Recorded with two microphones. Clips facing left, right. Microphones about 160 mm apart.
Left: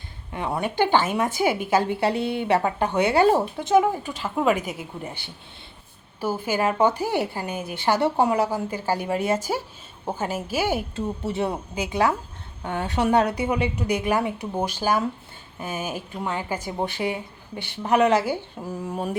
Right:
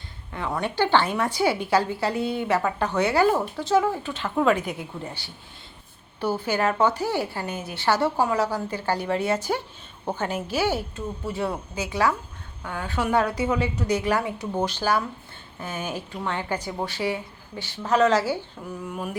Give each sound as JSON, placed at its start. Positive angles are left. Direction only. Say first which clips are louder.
{"t": 0.3, "sound": "a woman's voice", "louder": "left 1 dB", "side_deg": 20}
{"t": 3.7, "sound": "a woman's voice", "louder": "left 2 dB", "side_deg": 15}
{"t": 6.1, "sound": "a woman's voice", "louder": "even", "side_deg": 10}
{"t": 10.9, "sound": "a woman's voice", "louder": "left 4 dB", "side_deg": 25}
{"t": 18.6, "sound": "speech", "louder": "left 3 dB", "side_deg": 35}